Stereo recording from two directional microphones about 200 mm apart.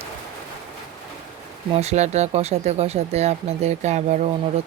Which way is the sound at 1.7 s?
35° right (ahead or behind).